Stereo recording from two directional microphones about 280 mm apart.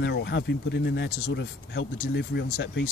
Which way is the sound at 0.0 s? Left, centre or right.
Left.